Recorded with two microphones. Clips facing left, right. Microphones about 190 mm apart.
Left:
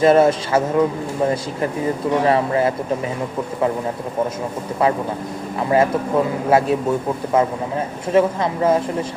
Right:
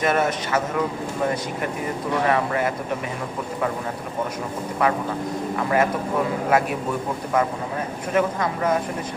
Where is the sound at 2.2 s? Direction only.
30° left (ahead or behind).